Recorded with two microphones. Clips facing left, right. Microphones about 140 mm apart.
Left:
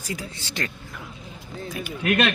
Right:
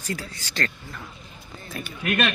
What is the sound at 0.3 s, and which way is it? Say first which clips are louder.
Speech: right 1 dB; 25° left (ahead or behind).